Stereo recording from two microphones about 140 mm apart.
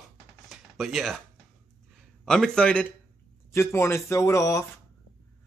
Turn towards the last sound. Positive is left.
turn(degrees=20)  # may be behind; listen again after turning